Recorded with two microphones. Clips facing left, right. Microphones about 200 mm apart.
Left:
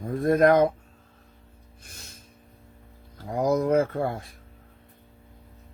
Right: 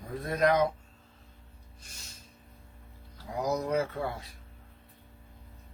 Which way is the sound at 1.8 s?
55° left (ahead or behind).